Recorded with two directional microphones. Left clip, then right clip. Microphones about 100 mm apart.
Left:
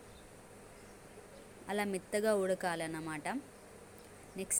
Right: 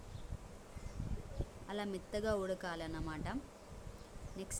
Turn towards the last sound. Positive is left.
turn(degrees=25)  # may be behind; listen again after turning